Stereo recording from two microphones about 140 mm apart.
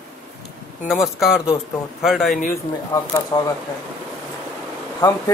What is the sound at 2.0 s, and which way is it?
Speech, centre (ahead or behind).